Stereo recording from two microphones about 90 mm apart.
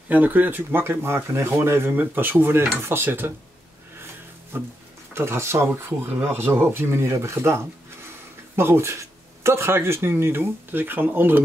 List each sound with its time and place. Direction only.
0.1 s speech: 20° right (ahead or behind)
4.5 s speech: 25° right (ahead or behind)